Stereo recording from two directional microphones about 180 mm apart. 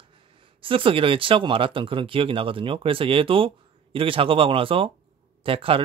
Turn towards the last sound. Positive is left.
turn(degrees=-30)  # may be behind; listen again after turning